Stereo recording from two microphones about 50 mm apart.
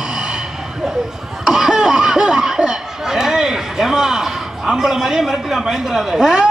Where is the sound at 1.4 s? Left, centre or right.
Centre.